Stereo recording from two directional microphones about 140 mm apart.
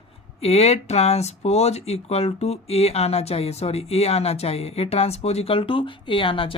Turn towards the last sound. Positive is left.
turn(degrees=40)  # may be behind; listen again after turning